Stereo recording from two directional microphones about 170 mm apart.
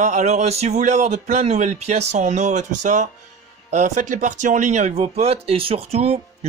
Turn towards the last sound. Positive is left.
turn(degrees=-40)  # may be behind; listen again after turning